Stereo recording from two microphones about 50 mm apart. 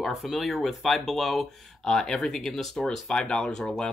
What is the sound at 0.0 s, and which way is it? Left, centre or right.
Speech, centre.